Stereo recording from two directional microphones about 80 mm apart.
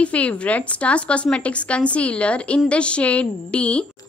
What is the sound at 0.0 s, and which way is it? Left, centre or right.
A woman's voice, centre.